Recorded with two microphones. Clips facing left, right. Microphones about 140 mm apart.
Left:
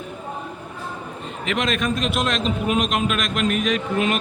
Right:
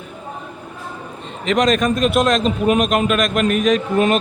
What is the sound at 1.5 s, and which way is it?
A man's voice, 40° right (ahead or behind).